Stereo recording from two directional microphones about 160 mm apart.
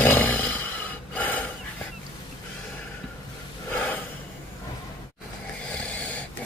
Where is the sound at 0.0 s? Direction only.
10° left (ahead or behind).